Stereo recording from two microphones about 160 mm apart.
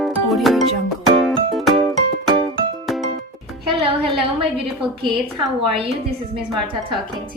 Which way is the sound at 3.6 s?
35° right (ahead or behind).